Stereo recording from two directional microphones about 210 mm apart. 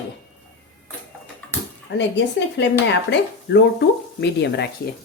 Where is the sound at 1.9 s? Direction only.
60° left (ahead or behind).